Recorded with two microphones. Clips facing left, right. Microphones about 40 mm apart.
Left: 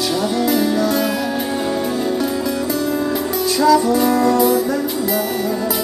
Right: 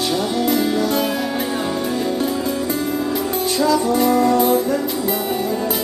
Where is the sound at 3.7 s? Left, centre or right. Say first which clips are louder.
Left 3 dB; right.